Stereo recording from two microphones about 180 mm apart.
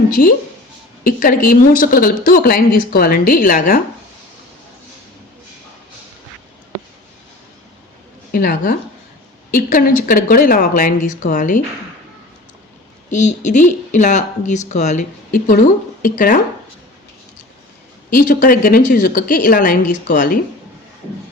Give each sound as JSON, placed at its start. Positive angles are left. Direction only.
{"t": 0.1, "sound": "speech", "side_deg": 50}
{"t": 8.3, "sound": "speech", "side_deg": 50}
{"t": 13.1, "sound": "speech", "side_deg": 45}
{"t": 18.1, "sound": "speech", "side_deg": 50}